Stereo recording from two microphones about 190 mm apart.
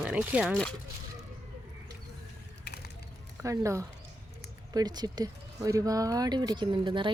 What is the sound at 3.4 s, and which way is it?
Speech, 15° right (ahead or behind).